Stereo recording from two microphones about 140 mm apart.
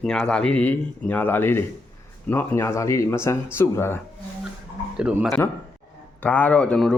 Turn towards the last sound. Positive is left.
turn(degrees=5)  # may be behind; listen again after turning